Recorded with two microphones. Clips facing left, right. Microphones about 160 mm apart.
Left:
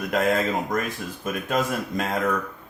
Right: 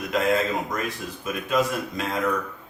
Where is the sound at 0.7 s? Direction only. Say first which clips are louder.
Left 2 dB; 50° left (ahead or behind).